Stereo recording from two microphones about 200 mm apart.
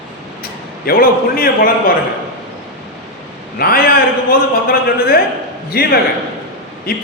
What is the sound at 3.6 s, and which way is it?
Speech, 50° left (ahead or behind).